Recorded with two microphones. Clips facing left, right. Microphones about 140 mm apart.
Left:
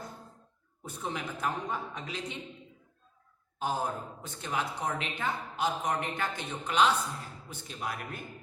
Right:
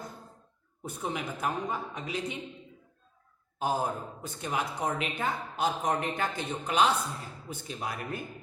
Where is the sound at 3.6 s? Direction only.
10° right (ahead or behind).